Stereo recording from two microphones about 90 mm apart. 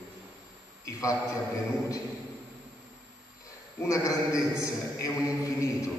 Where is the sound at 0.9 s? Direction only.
40° left (ahead or behind).